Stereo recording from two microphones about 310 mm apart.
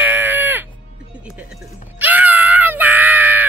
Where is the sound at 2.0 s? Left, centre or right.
Centre.